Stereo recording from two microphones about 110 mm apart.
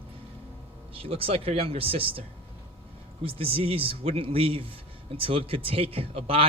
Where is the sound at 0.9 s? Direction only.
60° right (ahead or behind).